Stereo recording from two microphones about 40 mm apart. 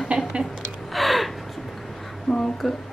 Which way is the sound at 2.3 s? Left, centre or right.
Centre.